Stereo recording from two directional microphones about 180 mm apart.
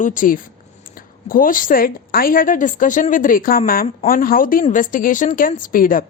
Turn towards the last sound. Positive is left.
turn(degrees=50)  # may be behind; listen again after turning